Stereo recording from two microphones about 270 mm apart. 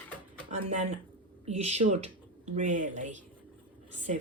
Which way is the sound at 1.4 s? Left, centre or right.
Right.